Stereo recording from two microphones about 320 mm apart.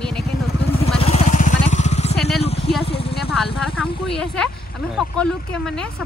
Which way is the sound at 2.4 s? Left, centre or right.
Centre.